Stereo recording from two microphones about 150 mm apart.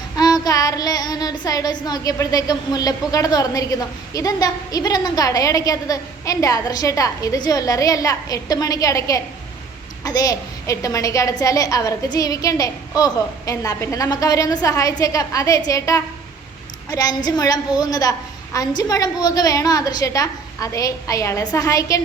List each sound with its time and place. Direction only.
0.2 s child singing: 25° left (ahead or behind)